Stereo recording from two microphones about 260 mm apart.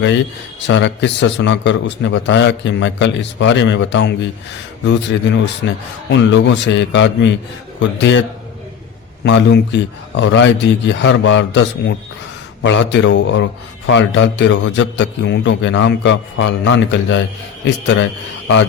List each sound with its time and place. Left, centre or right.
0.7 s speech: left
5.6 s a man's voice: left
9.2 s speech: left